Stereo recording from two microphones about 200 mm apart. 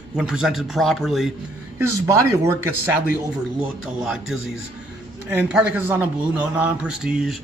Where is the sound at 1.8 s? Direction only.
15° right (ahead or behind).